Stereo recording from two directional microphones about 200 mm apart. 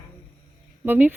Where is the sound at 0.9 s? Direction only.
10° right (ahead or behind).